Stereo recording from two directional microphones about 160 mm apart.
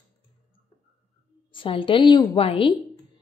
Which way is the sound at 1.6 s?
30° left (ahead or behind).